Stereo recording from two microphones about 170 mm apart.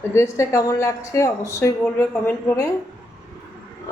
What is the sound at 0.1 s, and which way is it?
A woman's voice, 15° left (ahead or behind).